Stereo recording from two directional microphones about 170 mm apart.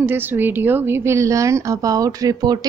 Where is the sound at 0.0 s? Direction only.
10° right (ahead or behind).